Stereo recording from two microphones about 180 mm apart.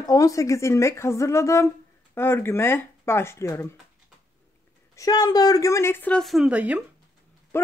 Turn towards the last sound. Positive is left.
turn(degrees=-5)  # may be behind; listen again after turning